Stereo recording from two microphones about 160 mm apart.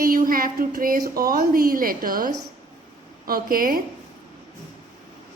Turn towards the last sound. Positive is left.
turn(degrees=-65)  # may be behind; listen again after turning